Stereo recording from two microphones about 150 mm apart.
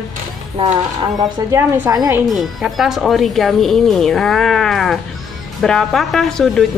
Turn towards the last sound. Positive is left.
turn(degrees=5)  # may be behind; listen again after turning